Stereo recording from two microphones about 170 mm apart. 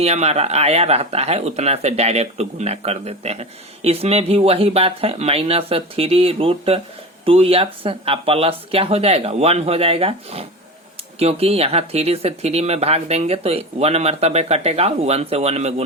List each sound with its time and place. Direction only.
0.0 s speech: 40° right (ahead or behind)